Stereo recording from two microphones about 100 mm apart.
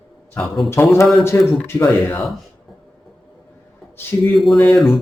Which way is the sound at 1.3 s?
20° left (ahead or behind).